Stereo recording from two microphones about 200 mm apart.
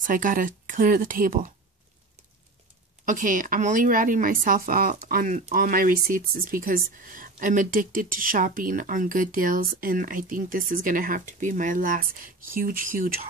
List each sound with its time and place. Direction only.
0.0 s speech: 40° right (ahead or behind)
3.1 s speech: 40° right (ahead or behind)